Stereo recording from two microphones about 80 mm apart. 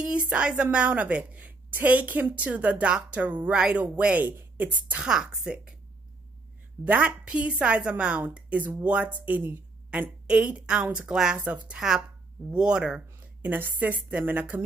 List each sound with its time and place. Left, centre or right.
0.0 s a woman's voice: centre
6.8 s a woman's voice: centre
13.5 s a woman's voice: right